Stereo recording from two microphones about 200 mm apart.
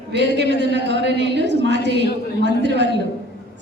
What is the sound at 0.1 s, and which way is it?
A woman's voice, 60° right (ahead or behind).